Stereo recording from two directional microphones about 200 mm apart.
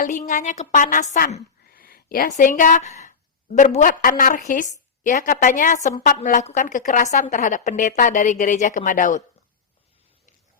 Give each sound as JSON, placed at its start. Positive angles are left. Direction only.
{"t": 0.0, "sound": "a woman's voice", "side_deg": 40}
{"t": 1.1, "sound": "a sound", "side_deg": 45}
{"t": 2.4, "sound": "a woman's voice", "side_deg": 40}